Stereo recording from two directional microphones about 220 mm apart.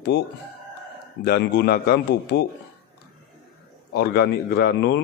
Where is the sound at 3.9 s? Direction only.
45° left (ahead or behind).